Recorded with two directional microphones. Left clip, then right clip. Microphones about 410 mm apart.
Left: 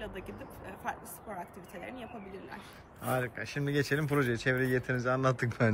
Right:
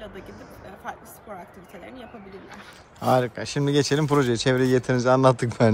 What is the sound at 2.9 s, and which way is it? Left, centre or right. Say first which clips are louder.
Speech: right 12 dB; centre.